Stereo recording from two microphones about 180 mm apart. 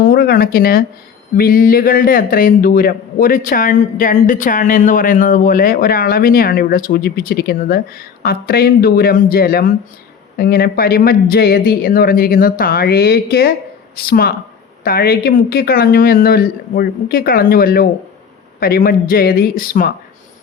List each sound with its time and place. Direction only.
0.0 s a man's voice: 55° left (ahead or behind)